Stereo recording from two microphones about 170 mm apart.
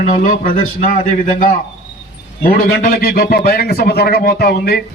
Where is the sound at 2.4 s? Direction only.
60° left (ahead or behind).